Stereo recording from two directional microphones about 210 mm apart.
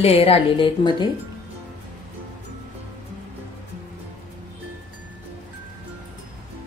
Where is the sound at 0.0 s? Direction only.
30° left (ahead or behind).